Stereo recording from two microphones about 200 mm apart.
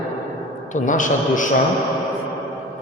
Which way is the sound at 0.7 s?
40° left (ahead or behind).